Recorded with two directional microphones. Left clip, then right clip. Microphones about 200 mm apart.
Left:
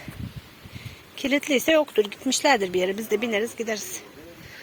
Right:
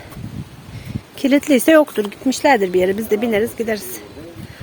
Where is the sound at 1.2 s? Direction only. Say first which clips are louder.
Right 8 dB; 25° right (ahead or behind).